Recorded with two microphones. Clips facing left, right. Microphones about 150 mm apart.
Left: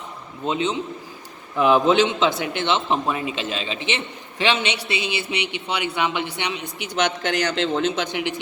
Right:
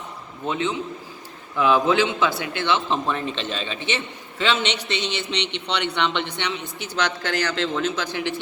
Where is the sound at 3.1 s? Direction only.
10° left (ahead or behind).